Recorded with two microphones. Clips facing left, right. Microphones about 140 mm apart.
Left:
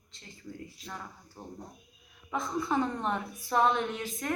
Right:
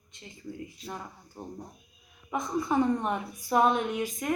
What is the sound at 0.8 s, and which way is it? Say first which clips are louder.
Speech: right 5 dB; centre (ahead or behind).